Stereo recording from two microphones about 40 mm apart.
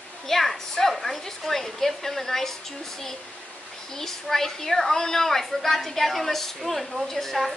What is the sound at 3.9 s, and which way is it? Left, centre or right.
A woman's voice, centre.